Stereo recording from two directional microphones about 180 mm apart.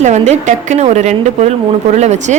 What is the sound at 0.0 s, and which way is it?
A woman's voice, 40° right (ahead or behind).